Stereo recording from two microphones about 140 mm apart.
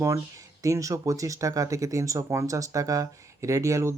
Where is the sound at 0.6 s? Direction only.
25° right (ahead or behind).